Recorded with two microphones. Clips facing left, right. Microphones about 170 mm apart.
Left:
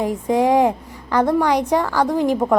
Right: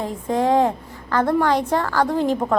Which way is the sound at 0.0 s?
15° left (ahead or behind).